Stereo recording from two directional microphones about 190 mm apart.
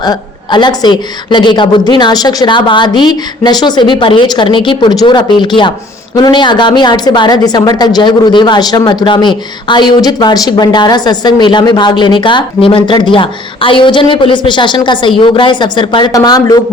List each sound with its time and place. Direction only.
0.0 s a woman's voice: 20° left (ahead or behind)